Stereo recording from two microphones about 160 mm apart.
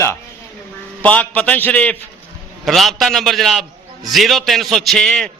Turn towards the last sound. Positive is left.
turn(degrees=5)  # may be behind; listen again after turning